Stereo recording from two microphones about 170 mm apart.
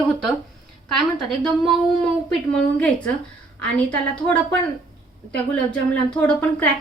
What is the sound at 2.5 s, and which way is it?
Speech, 5° left (ahead or behind).